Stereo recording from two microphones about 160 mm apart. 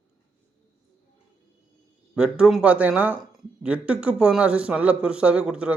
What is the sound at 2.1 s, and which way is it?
Speech, 5° right (ahead or behind).